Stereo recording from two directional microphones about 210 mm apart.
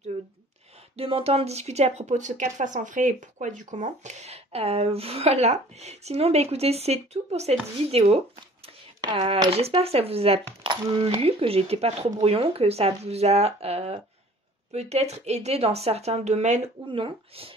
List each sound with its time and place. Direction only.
0.9 s speech: 25° right (ahead or behind)